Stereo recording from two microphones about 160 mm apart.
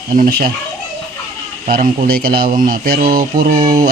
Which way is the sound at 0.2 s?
70° right (ahead or behind).